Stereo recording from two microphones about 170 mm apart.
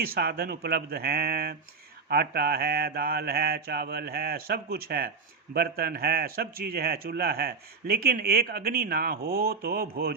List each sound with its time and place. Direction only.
0.0 s a man's voice: 60° right (ahead or behind)